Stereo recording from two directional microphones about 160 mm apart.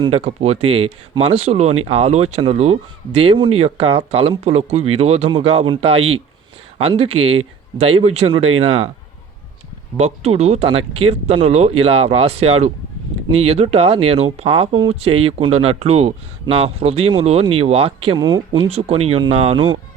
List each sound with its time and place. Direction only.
0.0 s speech: 35° right (ahead or behind)
10.0 s speech: 40° right (ahead or behind); by 18.7 s 25° right (ahead or behind)
18.7 s speech: 40° right (ahead or behind)